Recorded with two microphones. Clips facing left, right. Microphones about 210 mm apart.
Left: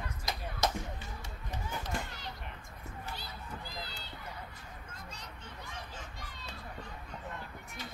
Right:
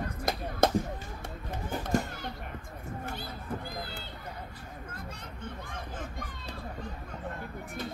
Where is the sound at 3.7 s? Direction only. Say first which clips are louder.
Right 5 dB; 55° right (ahead or behind).